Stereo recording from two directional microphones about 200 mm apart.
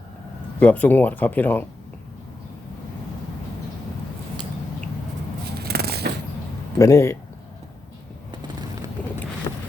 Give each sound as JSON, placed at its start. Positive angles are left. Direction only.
{"t": 0.6, "sound": "speech", "side_deg": 10}
{"t": 5.5, "sound": "a sound", "side_deg": -50}
{"t": 6.7, "sound": "speech", "side_deg": 15}
{"t": 9.0, "sound": "vehicle", "side_deg": 10}